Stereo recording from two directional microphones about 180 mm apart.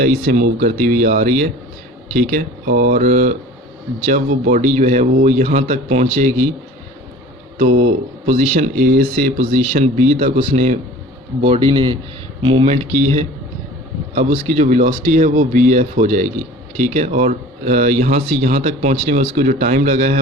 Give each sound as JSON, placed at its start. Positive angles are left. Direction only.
{"t": 0.0, "sound": "speech", "side_deg": -45}
{"t": 8.3, "sound": "speech", "side_deg": -40}
{"t": 9.0, "sound": "a man's voice", "side_deg": -50}
{"t": 19.4, "sound": "speech", "side_deg": -45}